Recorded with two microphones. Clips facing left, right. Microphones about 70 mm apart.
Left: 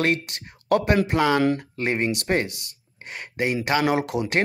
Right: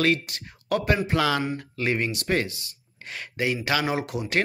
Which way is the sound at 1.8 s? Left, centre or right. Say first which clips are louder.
Left 2 dB; left.